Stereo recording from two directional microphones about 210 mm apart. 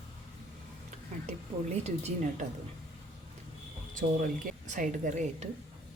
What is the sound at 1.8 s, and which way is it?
Speech, 30° right (ahead or behind).